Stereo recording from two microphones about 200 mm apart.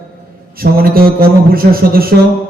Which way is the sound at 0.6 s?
50° right (ahead or behind).